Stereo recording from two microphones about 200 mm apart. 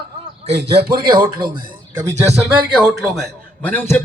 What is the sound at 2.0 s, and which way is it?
Speech, 15° right (ahead or behind).